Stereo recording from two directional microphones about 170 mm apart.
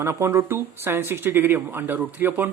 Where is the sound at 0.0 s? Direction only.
15° right (ahead or behind).